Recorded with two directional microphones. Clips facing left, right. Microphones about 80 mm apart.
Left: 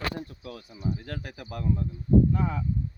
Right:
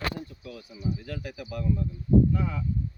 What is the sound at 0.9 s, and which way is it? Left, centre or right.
Speech, left.